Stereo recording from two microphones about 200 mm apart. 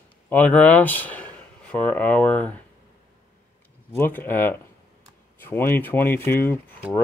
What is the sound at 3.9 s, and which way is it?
Speech, 10° left (ahead or behind).